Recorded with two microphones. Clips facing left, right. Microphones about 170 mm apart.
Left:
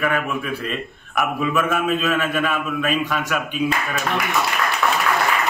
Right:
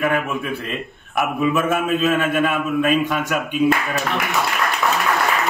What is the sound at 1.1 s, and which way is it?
A man's voice, 25° right (ahead or behind).